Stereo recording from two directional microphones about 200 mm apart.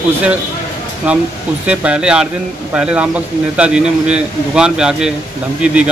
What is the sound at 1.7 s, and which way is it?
A man's voice, 5° right (ahead or behind).